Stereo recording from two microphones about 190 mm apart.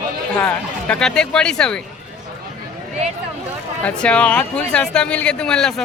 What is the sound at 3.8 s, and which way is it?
Speech, 5° left (ahead or behind).